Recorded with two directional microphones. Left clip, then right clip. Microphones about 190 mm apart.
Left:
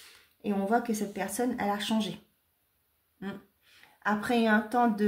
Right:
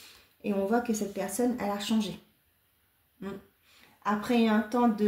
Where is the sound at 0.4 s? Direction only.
40° left (ahead or behind).